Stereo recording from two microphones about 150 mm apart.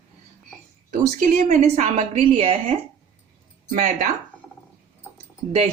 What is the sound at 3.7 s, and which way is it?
Speech, 70° right (ahead or behind).